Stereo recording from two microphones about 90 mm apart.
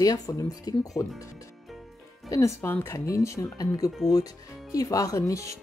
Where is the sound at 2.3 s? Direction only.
35° left (ahead or behind).